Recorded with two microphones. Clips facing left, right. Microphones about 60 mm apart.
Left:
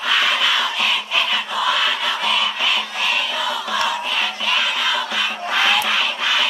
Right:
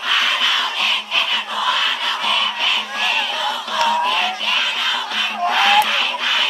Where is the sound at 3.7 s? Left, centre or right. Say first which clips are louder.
Right 5 dB; centre.